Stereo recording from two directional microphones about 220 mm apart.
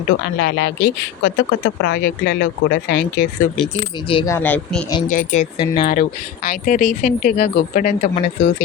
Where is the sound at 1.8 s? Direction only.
45° left (ahead or behind).